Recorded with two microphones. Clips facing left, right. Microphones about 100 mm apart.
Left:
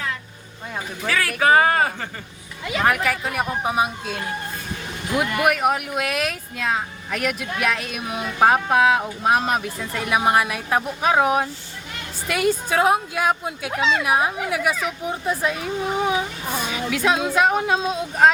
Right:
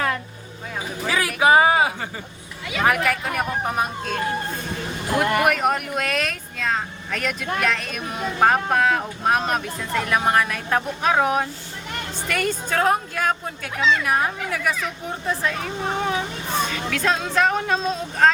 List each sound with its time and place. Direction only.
1.0 s a sound: 15° right (ahead or behind)
2.7 s speech: centre (ahead or behind)
5.4 s speech: 5° left (ahead or behind)